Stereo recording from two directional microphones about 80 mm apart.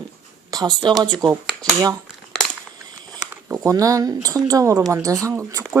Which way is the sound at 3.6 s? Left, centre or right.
Right.